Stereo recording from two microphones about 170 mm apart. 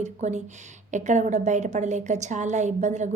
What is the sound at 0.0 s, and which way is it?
A woman's voice, 45° right (ahead or behind).